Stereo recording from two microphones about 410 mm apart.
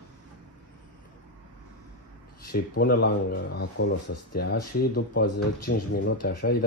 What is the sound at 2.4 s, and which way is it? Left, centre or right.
Speech, left.